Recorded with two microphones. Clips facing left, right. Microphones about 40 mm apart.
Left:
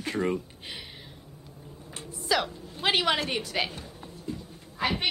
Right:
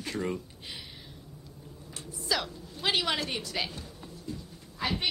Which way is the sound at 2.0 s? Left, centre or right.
Centre.